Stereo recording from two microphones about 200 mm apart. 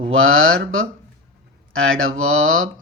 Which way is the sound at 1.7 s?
90° right.